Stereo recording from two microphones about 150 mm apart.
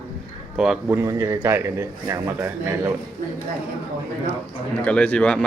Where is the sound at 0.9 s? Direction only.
20° right (ahead or behind).